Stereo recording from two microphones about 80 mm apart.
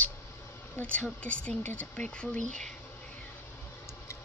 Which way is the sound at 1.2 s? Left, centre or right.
Centre.